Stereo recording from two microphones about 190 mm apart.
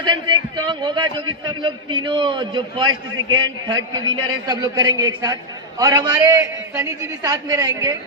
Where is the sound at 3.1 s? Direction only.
90° right.